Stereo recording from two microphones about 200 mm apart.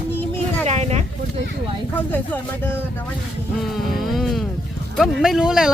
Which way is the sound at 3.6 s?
Centre (ahead or behind).